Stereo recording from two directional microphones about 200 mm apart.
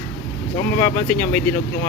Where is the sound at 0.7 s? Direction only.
10° left (ahead or behind).